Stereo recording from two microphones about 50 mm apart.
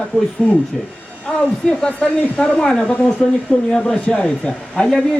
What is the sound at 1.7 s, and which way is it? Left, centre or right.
A woman's voice, centre.